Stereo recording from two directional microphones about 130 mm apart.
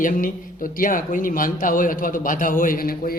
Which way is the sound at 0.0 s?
90° left.